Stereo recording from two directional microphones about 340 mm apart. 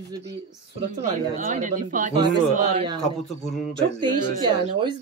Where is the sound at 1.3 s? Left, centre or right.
Right.